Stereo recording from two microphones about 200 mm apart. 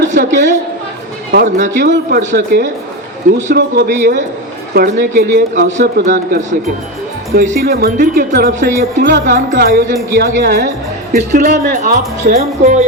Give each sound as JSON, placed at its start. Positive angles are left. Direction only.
{"t": 0.1, "sound": "a woman's voice", "side_deg": -40}
{"t": 1.8, "sound": "speech", "side_deg": -55}
{"t": 4.7, "sound": "speech", "side_deg": -45}